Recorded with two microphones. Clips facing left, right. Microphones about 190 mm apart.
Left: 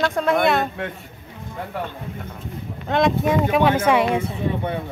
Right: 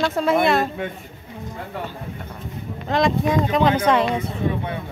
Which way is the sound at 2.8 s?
Centre (ahead or behind).